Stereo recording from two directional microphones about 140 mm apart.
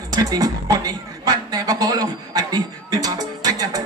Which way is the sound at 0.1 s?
25° right (ahead or behind).